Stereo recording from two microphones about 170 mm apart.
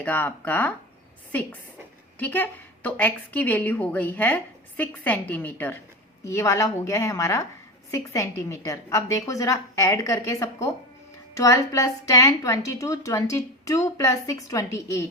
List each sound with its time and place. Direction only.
0.0 s a woman's voice: 10° left (ahead or behind)
2.1 s a woman's voice: 10° left (ahead or behind)